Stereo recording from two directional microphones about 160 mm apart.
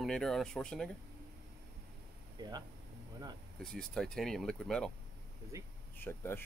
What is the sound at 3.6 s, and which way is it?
Speech, 5° left (ahead or behind).